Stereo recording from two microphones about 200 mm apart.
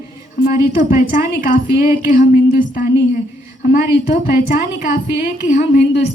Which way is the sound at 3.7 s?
55° left (ahead or behind).